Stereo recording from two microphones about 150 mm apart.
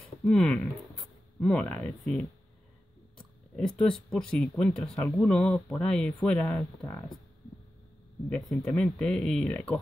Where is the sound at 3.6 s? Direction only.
5° left (ahead or behind).